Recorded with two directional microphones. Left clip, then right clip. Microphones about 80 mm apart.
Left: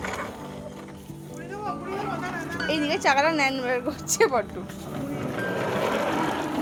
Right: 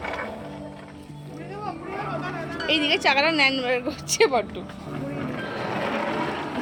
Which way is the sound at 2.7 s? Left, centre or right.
Right.